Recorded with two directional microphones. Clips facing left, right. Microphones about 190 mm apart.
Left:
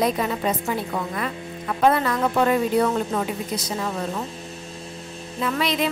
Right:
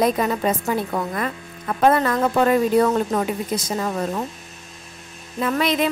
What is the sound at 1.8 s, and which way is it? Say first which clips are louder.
Speech: right 2 dB; 45° right (ahead or behind).